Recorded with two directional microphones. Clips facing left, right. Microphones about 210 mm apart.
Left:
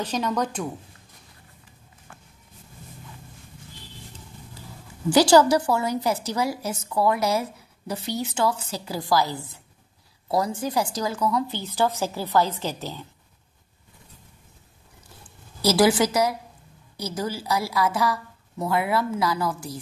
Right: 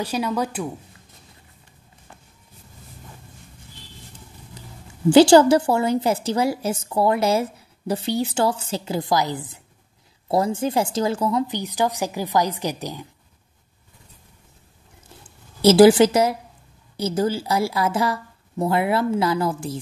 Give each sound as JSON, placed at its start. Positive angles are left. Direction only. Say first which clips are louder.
{"t": 0.0, "sound": "a woman's voice", "louder": "right 2 dB", "side_deg": -10}
{"t": 5.1, "sound": "a woman's voice", "louder": "right 5 dB", "side_deg": -25}
{"t": 15.6, "sound": "a woman's voice", "louder": "right 8 dB", "side_deg": -25}